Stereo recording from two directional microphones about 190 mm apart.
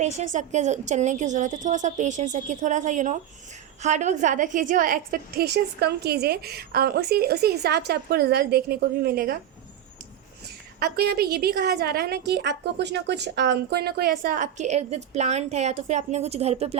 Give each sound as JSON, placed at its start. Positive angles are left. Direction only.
{"t": 0.0, "sound": "a woman's voice", "side_deg": -40}
{"t": 10.8, "sound": "a woman's voice", "side_deg": -55}